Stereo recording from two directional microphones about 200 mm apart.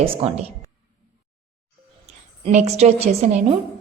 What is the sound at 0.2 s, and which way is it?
Speech, 30° right (ahead or behind).